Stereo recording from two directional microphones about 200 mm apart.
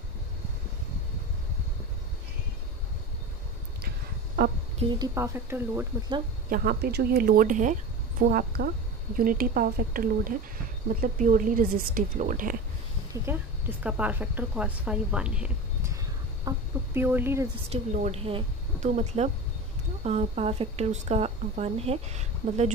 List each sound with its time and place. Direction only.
4.4 s a woman's voice: 55° right (ahead or behind)
4.9 s a woman's voice: 15° right (ahead or behind)
6.5 s a woman's voice: 50° right (ahead or behind)
13.1 s a woman's voice: 10° right (ahead or behind)
17.6 s speech: 35° right (ahead or behind)